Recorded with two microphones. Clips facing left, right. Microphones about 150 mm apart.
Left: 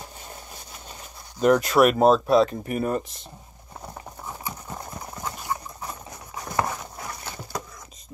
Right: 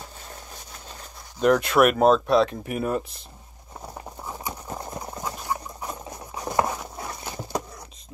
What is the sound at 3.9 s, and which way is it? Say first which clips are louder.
Clip-clop: right 2 dB; 10° right (ahead or behind).